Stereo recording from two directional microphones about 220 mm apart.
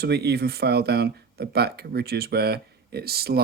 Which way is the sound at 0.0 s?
50° right (ahead or behind).